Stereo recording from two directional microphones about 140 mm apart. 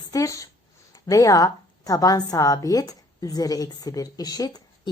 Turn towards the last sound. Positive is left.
turn(degrees=25)  # may be behind; listen again after turning